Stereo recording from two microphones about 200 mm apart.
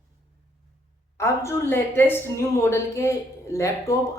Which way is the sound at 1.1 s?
15° left (ahead or behind).